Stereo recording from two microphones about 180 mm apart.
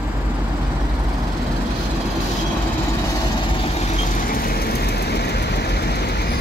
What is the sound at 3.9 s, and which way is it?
Vehicle, 55° left (ahead or behind).